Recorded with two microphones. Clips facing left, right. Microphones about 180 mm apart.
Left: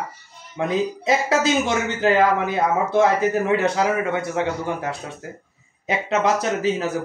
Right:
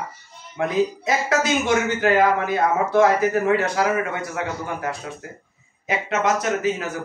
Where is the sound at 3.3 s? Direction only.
25° left (ahead or behind).